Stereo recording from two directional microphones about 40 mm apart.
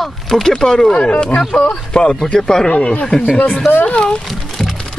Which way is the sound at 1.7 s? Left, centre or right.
Centre.